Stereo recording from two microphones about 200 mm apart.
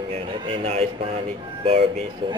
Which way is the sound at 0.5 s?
30° right (ahead or behind).